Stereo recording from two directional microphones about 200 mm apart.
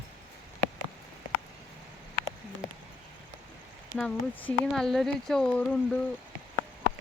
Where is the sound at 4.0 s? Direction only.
5° left (ahead or behind).